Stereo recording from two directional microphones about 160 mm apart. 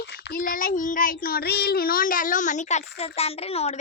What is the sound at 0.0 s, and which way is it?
Child singing, 90° left.